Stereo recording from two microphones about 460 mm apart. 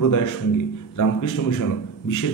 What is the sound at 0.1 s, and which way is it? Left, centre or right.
A man's voice, left.